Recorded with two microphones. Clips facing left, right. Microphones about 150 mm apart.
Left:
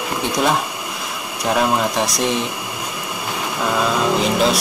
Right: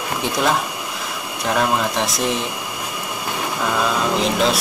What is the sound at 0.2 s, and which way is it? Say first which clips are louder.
Speech: left 1 dB; 5° left (ahead or behind).